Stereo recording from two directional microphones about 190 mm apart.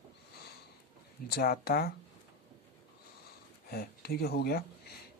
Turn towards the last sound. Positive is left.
turn(degrees=55)  # may be behind; listen again after turning